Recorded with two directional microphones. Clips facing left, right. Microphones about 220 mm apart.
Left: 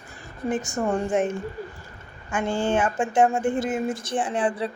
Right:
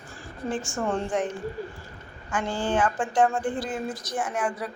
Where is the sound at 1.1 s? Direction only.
25° left (ahead or behind).